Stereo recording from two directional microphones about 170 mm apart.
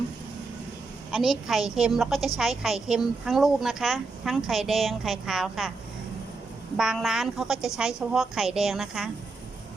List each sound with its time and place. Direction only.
1.1 s speech: centre (ahead or behind)
6.7 s speech: centre (ahead or behind)